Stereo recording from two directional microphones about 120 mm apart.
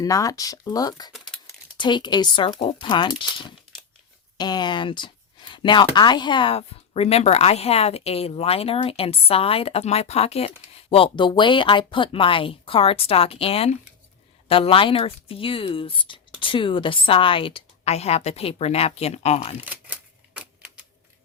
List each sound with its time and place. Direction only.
0.0 s speech: 30° left (ahead or behind)
1.1 s crumpling: centre (ahead or behind)
1.8 s speech: 40° left (ahead or behind); by 19.5 s 60° left (ahead or behind)
19.6 s typewriter: 15° right (ahead or behind)